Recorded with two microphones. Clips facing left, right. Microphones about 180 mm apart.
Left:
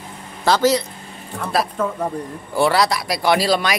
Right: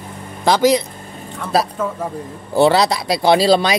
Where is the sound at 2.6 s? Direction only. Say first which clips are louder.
Right 4 dB; 25° right (ahead or behind).